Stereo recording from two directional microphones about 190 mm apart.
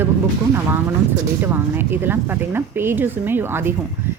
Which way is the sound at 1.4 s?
10° right (ahead or behind).